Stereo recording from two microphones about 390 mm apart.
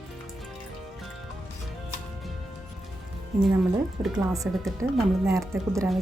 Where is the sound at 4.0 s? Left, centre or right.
Centre.